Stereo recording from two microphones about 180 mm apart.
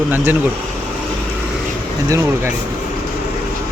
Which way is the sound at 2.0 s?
15° right (ahead or behind).